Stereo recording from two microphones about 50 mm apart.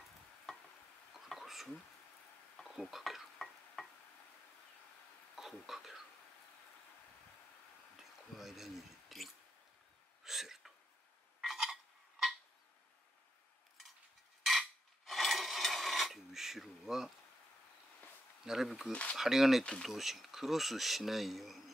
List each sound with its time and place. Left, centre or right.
1.1 s stir: centre
5.3 s a sound: centre
8.0 s a sound: centre
10.2 s hiccup: centre
11.4 s a sound: centre
15.0 s mechanisms: centre
18.4 s speech: centre
18.9 s speech: left
19.1 s speech: centre